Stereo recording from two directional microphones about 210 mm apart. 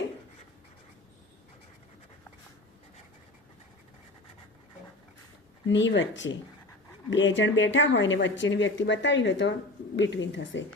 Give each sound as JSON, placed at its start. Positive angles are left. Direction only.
{"t": 5.6, "sound": "speech", "side_deg": 60}